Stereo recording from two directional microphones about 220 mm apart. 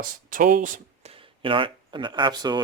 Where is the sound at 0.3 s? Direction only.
35° right (ahead or behind).